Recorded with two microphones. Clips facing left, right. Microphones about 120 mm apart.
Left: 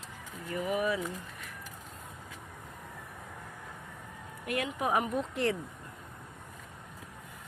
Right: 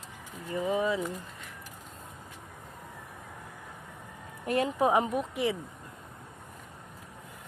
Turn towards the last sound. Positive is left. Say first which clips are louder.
# right 1 dB
turn(degrees=-10)  # may be behind; listen again after turning